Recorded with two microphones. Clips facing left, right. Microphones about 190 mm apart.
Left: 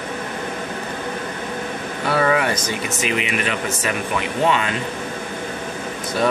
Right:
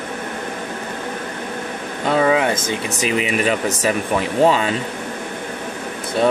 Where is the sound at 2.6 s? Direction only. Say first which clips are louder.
Right 2 dB; 35° right (ahead or behind).